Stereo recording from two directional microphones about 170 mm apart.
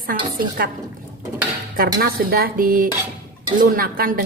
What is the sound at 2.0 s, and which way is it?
A woman's voice, 60° right (ahead or behind).